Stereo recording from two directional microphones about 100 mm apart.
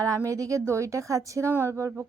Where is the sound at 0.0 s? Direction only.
35° right (ahead or behind).